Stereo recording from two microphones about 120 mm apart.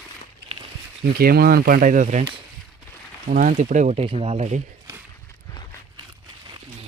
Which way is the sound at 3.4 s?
90° right.